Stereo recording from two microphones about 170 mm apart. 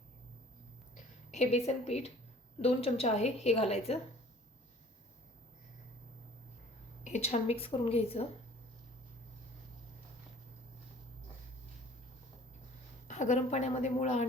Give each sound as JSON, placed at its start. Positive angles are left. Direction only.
{"t": 1.3, "sound": "a woman's voice", "side_deg": 40}
{"t": 7.0, "sound": "a woman's voice", "side_deg": 40}
{"t": 13.1, "sound": "a woman's voice", "side_deg": 45}